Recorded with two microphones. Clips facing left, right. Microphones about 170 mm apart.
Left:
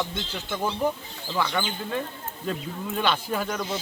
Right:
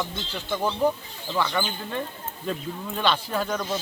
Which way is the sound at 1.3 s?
Centre (ahead or behind).